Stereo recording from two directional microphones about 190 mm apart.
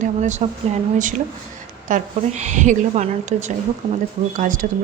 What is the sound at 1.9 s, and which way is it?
A woman's voice, 40° right (ahead or behind).